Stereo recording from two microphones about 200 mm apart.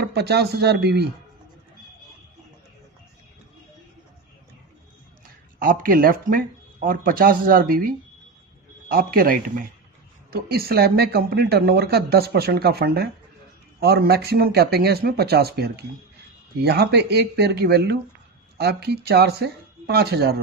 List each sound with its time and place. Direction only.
0.0 s speech: 55° right (ahead or behind)
5.6 s a man's voice: 45° right (ahead or behind)